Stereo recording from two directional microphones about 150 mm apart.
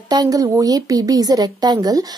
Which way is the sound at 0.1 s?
25° right (ahead or behind).